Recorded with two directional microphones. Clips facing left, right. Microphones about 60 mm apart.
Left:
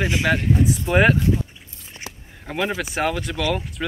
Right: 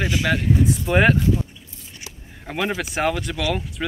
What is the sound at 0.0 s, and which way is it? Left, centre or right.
Speech, centre.